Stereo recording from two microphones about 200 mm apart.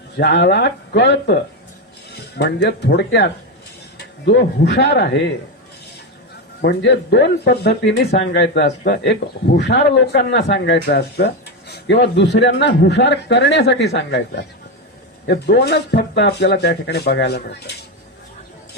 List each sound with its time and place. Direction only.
0.2 s speech: 55° left (ahead or behind)
6.6 s speech: 60° left (ahead or behind)